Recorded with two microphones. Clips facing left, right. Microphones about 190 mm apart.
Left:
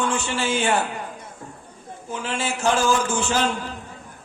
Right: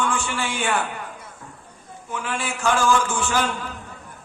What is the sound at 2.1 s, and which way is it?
A man's voice, 25° left (ahead or behind).